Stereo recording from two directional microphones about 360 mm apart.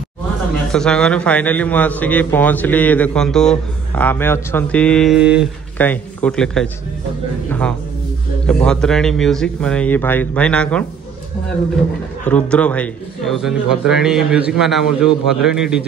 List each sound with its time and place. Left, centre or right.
0.7 s a man's voice: centre
12.3 s a man's voice: centre